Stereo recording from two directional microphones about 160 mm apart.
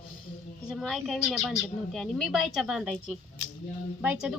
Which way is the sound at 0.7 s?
Centre (ahead or behind).